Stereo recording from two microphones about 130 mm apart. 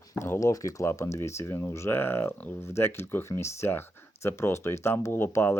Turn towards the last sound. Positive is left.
turn(degrees=20)  # may be behind; listen again after turning